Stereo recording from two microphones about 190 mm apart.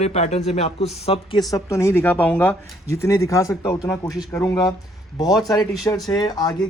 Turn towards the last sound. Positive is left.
turn(degrees=20)  # may be behind; listen again after turning